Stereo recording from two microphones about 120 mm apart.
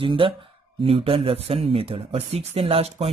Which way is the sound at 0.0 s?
45° right (ahead or behind).